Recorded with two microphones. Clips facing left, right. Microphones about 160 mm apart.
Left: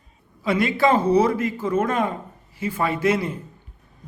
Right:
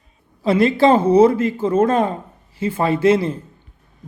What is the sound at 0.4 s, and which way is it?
A man's voice, 30° right (ahead or behind).